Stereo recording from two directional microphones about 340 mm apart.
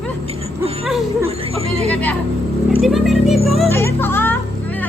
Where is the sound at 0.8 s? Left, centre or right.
Centre.